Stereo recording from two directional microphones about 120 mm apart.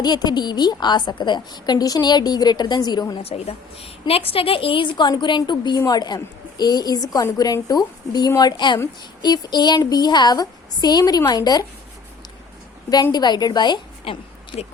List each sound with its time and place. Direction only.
0.0 s a woman's voice: 35° left (ahead or behind)
3.2 s a woman's voice: 55° left (ahead or behind); by 11.6 s 35° left (ahead or behind)
12.9 s a woman's voice: 35° left (ahead or behind); by 14.7 s 50° left (ahead or behind)